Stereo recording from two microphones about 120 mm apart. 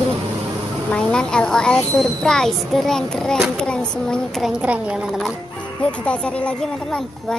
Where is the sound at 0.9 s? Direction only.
5° left (ahead or behind).